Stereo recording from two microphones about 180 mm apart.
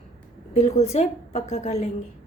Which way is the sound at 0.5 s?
40° left (ahead or behind).